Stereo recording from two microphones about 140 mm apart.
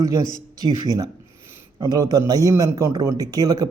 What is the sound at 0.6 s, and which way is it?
A man's voice, 25° right (ahead or behind).